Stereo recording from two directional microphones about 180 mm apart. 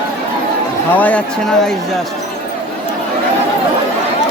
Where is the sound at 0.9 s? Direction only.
10° left (ahead or behind).